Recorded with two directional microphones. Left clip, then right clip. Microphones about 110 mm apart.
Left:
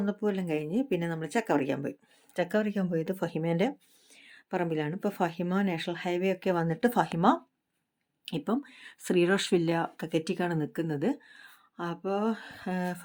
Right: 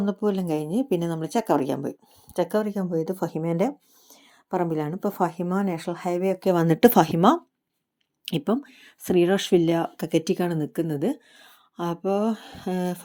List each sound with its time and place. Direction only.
0.0 s a woman's voice: 25° right (ahead or behind); by 6.4 s 5° right (ahead or behind)
6.6 s speech: 90° right; by 7.4 s 65° right (ahead or behind)
8.4 s speech: 35° right (ahead or behind)
8.8 s a woman's voice: 20° right (ahead or behind)